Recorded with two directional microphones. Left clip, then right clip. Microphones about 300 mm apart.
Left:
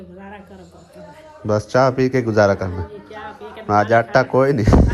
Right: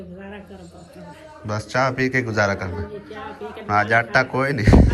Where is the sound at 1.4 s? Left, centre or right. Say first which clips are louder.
Left 6 dB; left.